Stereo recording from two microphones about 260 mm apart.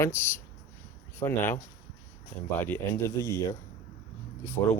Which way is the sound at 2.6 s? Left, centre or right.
Centre.